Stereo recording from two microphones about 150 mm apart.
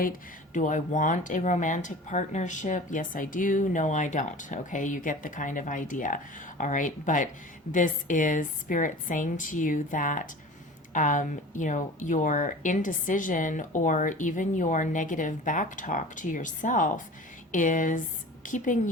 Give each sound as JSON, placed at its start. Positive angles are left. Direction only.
{"t": 0.0, "sound": "speech", "side_deg": 65}